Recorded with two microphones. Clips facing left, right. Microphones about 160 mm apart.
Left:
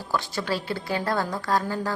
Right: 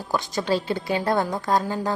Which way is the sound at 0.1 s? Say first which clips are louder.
Right 4 dB; 20° right (ahead or behind).